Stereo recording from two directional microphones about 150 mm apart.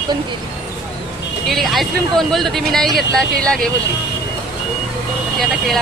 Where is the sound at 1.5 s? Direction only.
Centre (ahead or behind).